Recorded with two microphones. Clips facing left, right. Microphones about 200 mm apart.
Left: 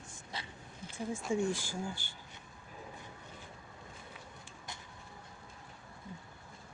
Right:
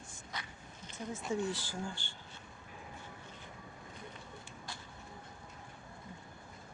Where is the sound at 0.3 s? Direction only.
30° left (ahead or behind).